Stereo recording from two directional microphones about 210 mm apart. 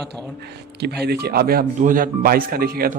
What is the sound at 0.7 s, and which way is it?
Speech, 50° right (ahead or behind).